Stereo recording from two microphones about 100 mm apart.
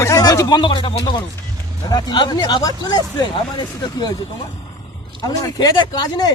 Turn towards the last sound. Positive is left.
turn(degrees=45)  # may be behind; listen again after turning